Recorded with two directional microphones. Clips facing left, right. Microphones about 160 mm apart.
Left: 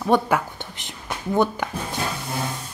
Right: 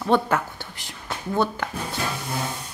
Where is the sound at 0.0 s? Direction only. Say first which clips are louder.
Left 1 dB; 10° left (ahead or behind).